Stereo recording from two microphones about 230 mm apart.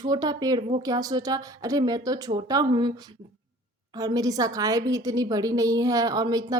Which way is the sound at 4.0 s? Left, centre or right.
Centre.